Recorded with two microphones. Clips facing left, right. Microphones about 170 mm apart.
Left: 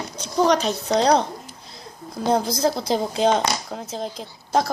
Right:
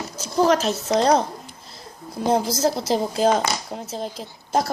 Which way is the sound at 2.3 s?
5° right (ahead or behind).